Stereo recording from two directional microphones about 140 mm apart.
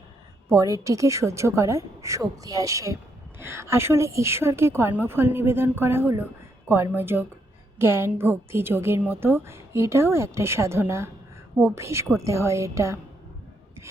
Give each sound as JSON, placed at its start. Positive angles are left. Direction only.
{"t": 0.5, "sound": "a woman's voice", "side_deg": -25}